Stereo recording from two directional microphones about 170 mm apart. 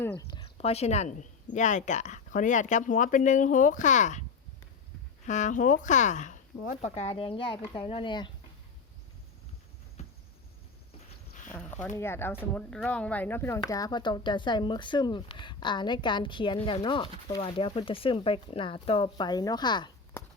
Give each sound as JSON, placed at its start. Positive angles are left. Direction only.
{"t": 0.0, "sound": "a sound", "side_deg": 15}
{"t": 0.6, "sound": "speech", "side_deg": 40}
{"t": 5.2, "sound": "speech", "side_deg": 45}
{"t": 11.5, "sound": "speech", "side_deg": 5}